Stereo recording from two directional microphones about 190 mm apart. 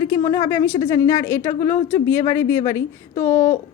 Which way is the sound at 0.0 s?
15° left (ahead or behind).